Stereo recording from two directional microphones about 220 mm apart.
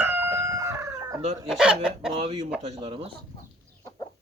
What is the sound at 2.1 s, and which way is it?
Speech, 25° right (ahead or behind).